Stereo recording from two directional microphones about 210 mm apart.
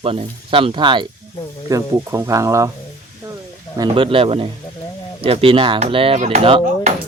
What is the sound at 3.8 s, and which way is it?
Speech, 25° right (ahead or behind).